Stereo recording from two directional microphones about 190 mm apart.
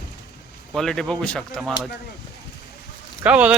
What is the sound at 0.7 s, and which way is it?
Speech, centre (ahead or behind).